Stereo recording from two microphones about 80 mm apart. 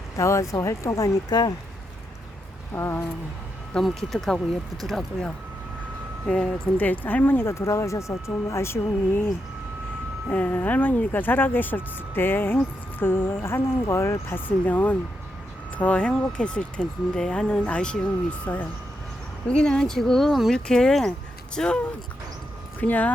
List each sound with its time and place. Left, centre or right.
0.2 s speech: left
2.7 s speech: left
3.8 s speech: centre
6.2 s speech: centre
6.7 s speech: left
22.8 s speech: centre